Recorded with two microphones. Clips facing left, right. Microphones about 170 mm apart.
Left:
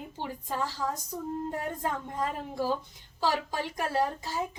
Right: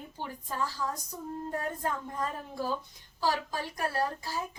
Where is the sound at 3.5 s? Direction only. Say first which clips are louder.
Left 3 dB; 20° left (ahead or behind).